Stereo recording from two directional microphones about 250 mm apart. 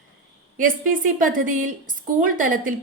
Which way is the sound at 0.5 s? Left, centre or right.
Right.